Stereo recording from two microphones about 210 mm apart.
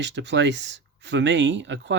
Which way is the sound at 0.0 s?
60° right (ahead or behind).